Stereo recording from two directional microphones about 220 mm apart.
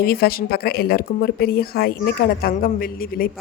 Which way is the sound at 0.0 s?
45° left (ahead or behind).